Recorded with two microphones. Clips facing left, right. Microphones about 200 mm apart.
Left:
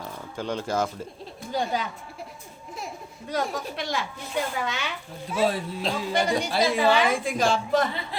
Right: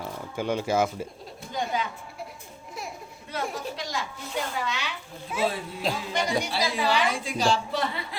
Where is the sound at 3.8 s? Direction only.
65° left (ahead or behind).